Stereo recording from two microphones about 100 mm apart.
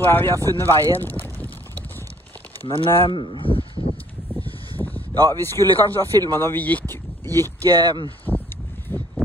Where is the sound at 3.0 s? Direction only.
60° left (ahead or behind).